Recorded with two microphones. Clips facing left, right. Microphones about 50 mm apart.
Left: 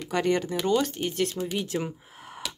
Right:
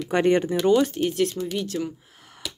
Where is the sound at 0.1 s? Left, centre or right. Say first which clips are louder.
Right 5 dB; right.